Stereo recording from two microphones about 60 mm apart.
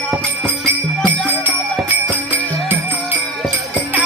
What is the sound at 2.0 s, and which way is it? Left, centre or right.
Music, right.